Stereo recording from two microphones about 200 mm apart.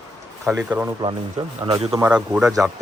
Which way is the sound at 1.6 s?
25° right (ahead or behind).